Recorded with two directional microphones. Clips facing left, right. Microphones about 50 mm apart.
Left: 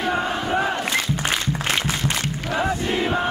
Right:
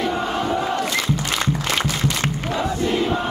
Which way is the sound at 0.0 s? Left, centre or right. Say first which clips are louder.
Right 1 dB; left.